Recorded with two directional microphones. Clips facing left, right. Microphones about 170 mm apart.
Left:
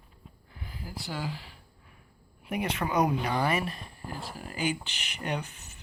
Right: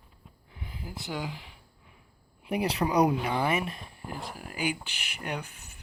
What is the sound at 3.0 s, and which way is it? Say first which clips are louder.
Speech: right 1 dB; 15° right (ahead or behind).